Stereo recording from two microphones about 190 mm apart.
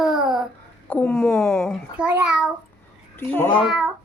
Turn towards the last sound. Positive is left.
turn(degrees=0)  # may be behind; listen again after turning